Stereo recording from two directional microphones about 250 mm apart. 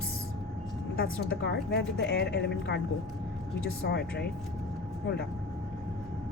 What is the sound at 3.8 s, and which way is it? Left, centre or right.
Speech, left.